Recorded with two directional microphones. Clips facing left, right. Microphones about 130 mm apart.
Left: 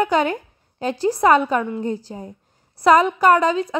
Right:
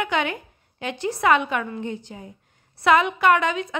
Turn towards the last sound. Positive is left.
turn(degrees=35)  # may be behind; listen again after turning